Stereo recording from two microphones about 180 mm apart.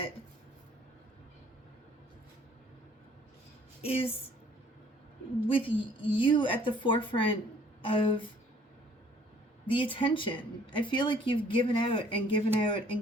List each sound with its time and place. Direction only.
3.8 s speech: 30° left (ahead or behind)
5.6 s speech: 30° left (ahead or behind)
9.6 s speech: 30° left (ahead or behind)